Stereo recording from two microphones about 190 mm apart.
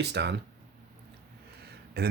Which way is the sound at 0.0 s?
60° right (ahead or behind).